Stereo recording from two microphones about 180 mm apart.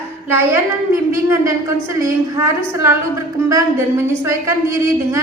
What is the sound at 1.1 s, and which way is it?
A woman's voice, 15° right (ahead or behind).